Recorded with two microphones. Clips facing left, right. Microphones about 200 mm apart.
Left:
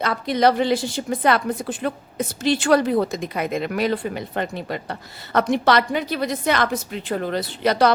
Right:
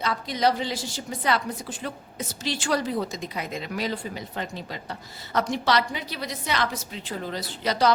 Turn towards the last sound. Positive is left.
turn(degrees=60)  # may be behind; listen again after turning